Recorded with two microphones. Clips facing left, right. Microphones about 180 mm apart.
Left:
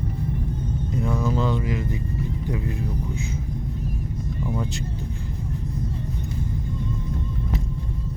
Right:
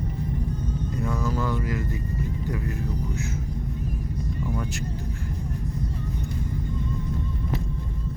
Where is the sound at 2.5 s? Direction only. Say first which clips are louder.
Left 2 dB; 20° left (ahead or behind).